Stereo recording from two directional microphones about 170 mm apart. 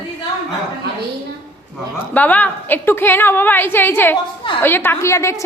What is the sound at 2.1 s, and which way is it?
A woman's voice, 10° left (ahead or behind).